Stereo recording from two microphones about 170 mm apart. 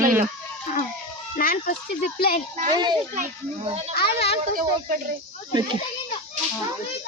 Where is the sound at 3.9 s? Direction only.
70° left (ahead or behind).